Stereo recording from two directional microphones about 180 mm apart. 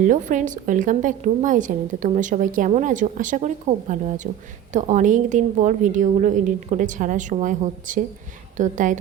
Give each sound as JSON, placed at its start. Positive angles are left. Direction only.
{"t": 0.0, "sound": "a woman's voice", "side_deg": -45}